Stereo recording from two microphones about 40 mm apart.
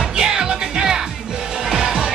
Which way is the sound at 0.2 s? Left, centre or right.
Centre.